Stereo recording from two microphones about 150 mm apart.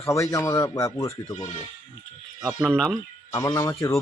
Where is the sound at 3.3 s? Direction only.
20° left (ahead or behind).